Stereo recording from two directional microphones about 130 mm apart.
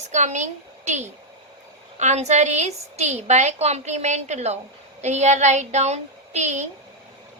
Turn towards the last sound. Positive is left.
turn(degrees=-65)  # may be behind; listen again after turning